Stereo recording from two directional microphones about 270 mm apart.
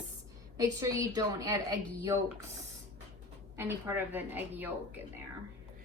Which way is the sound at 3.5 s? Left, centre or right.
Centre.